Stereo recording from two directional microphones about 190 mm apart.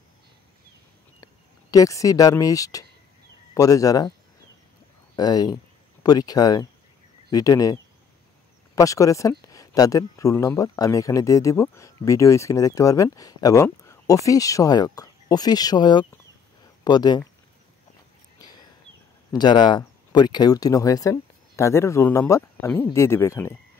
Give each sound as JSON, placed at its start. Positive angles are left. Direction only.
{"t": 1.2, "sound": "speech", "side_deg": 20}
{"t": 5.1, "sound": "speech", "side_deg": 20}
{"t": 18.4, "sound": "a sound", "side_deg": 20}
{"t": 19.3, "sound": "speech", "side_deg": 25}